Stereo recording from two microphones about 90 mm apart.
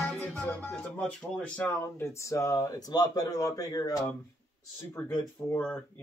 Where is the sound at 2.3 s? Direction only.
35° left (ahead or behind).